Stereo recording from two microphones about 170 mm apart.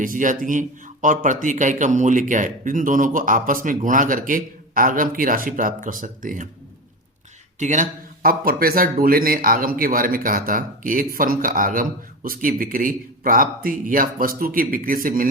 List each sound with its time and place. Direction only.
0.0 s speech: 50° right (ahead or behind)
7.6 s a man's voice: 45° right (ahead or behind)